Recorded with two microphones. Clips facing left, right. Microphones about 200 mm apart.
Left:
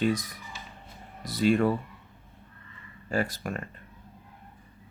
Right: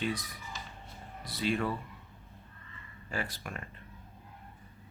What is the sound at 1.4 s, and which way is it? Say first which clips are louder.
Speech: left 9 dB; 50° left (ahead or behind).